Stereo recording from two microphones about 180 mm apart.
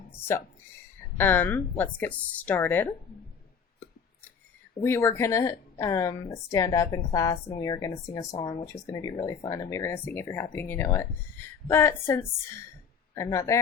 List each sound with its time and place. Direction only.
1.2 s a woman's voice: 10° left (ahead or behind)
4.8 s a woman's voice: 15° left (ahead or behind)